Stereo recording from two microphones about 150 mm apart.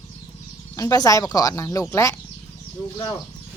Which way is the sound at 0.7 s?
25° left (ahead or behind).